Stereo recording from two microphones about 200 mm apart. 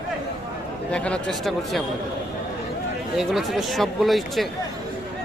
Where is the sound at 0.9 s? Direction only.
5° left (ahead or behind).